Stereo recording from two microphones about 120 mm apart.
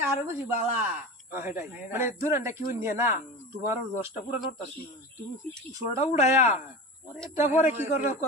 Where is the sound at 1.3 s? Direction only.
20° right (ahead or behind).